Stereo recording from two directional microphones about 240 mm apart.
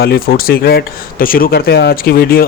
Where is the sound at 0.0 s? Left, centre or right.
Left.